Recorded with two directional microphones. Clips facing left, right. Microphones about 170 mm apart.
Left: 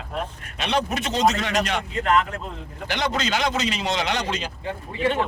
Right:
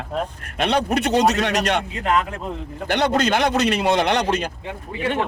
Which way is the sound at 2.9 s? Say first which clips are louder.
Right 6 dB; 60° right (ahead or behind).